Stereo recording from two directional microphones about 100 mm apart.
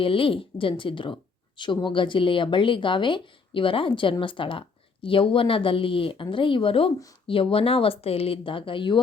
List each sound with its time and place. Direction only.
0.0 s speech: 65° left (ahead or behind)